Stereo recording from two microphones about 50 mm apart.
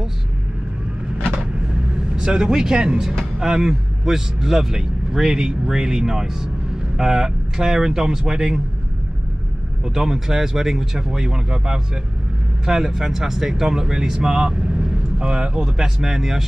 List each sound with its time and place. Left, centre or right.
2.1 s speech: centre
9.8 s speech: centre